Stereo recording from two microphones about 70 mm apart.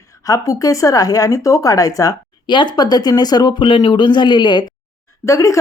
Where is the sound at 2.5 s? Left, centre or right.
Left.